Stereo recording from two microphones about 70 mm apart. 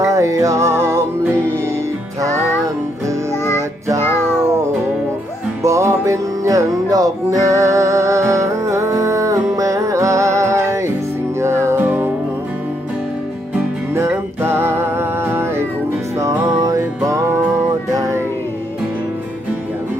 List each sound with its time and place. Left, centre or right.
0.0 s music: right
5.6 s music: right
13.9 s music: right
16.6 s music: right